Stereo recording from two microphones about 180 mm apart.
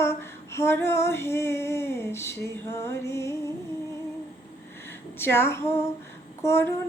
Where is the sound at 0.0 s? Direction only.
15° left (ahead or behind).